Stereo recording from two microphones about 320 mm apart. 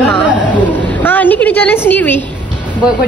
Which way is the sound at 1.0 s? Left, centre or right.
Centre.